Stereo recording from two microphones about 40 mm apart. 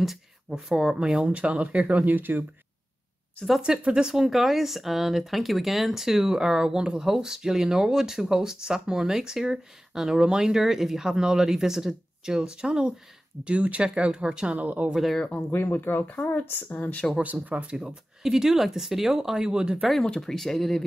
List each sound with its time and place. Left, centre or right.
0.0 s a sound: centre
0.6 s speech: centre
1.2 s speech: right
2.0 s speech: right
3.6 s speech: right
4.1 s speech: centre; by 14.6 s right
14.6 s speech: right
15.3 s speech: left
17.2 s speech: right
17.7 s speech: centre
20.2 s speech: centre